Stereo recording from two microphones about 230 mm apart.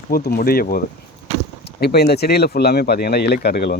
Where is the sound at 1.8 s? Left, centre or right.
Left.